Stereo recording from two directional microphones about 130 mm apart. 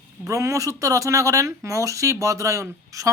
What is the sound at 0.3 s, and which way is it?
Speech, 25° right (ahead or behind).